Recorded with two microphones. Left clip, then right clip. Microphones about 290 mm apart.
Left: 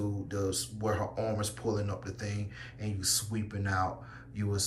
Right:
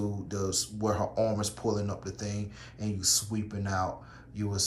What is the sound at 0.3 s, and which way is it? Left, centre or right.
Speech, centre.